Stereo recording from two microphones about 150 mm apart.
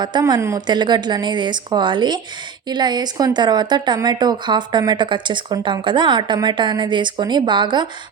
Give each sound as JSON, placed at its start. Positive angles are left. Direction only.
{"t": 0.0, "sound": "speech", "side_deg": -30}